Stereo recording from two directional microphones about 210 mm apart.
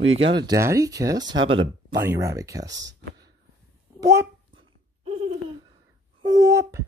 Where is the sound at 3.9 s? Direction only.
15° right (ahead or behind).